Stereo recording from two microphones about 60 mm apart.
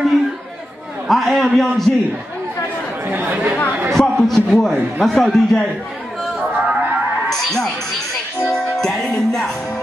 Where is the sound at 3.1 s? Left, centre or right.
Right.